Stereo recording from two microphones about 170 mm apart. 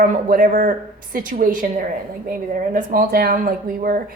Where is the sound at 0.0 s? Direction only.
55° right (ahead or behind).